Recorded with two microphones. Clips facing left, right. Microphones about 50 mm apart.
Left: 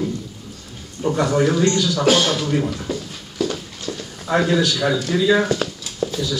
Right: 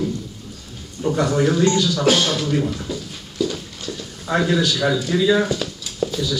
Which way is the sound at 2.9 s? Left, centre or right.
Left.